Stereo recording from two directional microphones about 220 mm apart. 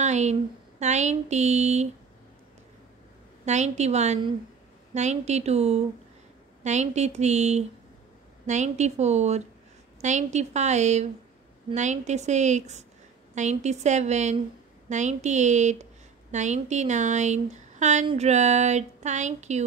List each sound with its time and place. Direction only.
0.0 s a woman's voice: 30° right (ahead or behind)
3.4 s a woman's voice: 30° right (ahead or behind)